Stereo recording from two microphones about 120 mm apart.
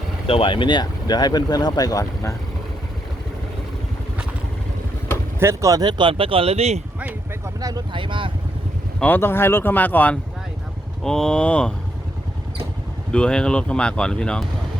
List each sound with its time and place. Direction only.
0.3 s speech: 45° left (ahead or behind); by 2.3 s 30° left (ahead or behind)
5.4 s speech: 25° right (ahead or behind); by 6.8 s 60° right (ahead or behind)
7.0 s a sound: 15° right (ahead or behind)
7.9 s speech: 45° right (ahead or behind)
9.0 s speech: 15° left (ahead or behind)
13.1 s speech: 10° left (ahead or behind)